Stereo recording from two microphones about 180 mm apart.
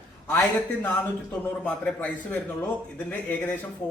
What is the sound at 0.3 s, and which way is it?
A man's voice, 10° left (ahead or behind).